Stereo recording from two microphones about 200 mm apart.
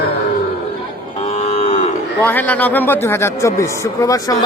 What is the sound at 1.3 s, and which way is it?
Moo, 30° left (ahead or behind).